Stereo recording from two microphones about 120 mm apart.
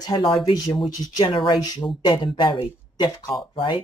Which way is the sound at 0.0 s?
40° left (ahead or behind).